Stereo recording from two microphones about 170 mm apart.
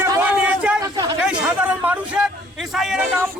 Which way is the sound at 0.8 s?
20° right (ahead or behind).